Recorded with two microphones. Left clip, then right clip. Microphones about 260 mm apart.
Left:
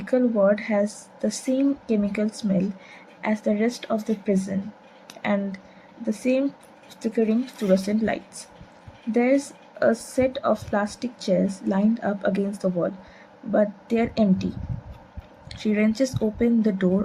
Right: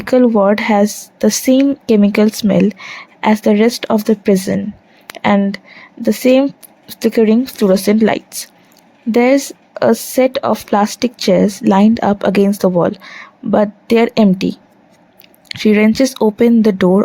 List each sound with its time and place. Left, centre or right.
0.0 s speech: right
15.4 s speech: right